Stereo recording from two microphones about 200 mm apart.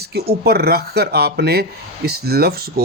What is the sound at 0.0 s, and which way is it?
Speech, 50° right (ahead or behind).